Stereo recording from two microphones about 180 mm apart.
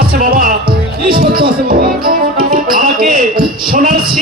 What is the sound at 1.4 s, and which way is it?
Music, 55° right (ahead or behind).